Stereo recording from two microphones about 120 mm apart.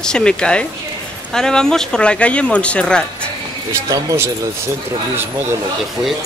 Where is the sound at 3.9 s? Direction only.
25° right (ahead or behind).